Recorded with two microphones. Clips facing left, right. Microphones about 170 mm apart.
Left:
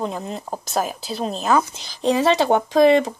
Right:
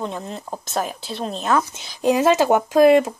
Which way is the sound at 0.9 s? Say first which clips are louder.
Left 2 dB; centre (ahead or behind).